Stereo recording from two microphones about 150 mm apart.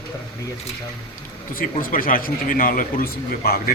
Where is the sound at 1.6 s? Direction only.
70° left (ahead or behind).